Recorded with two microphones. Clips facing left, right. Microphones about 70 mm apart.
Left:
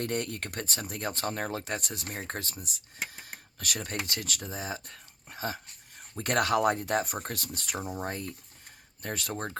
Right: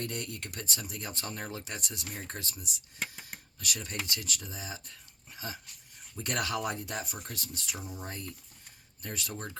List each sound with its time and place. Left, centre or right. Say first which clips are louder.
0.0 s speech: left 6 dB; left